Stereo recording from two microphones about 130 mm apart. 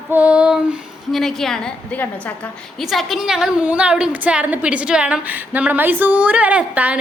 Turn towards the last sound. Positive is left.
turn(degrees=-10)  # may be behind; listen again after turning